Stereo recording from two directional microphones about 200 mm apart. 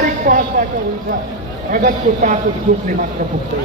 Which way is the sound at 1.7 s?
40° right (ahead or behind).